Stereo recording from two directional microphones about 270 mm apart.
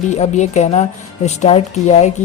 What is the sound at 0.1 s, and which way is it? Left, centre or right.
A woman's voice, left.